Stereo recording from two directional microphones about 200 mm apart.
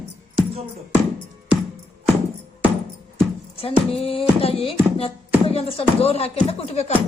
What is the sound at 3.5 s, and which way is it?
Speech, 30° left (ahead or behind).